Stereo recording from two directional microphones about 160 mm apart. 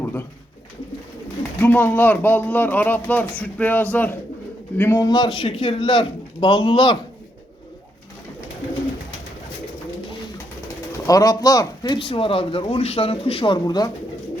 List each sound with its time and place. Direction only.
0.0 s bird: 10° left (ahead or behind)
1.6 s a man's voice: 10° left (ahead or behind); by 7.0 s 30° left (ahead or behind)
10.9 s speech: 20° left (ahead or behind)